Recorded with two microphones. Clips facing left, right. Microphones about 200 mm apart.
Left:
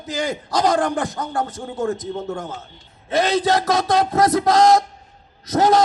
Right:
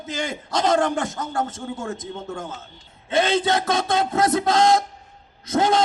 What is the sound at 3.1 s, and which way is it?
Speech, 25° right (ahead or behind).